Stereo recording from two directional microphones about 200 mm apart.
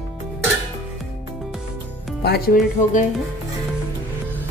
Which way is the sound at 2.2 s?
50° left (ahead or behind).